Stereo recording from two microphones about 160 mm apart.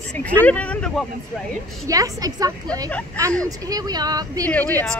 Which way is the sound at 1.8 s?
20° right (ahead or behind).